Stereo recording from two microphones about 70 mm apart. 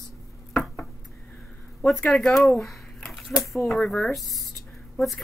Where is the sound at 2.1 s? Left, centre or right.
Centre.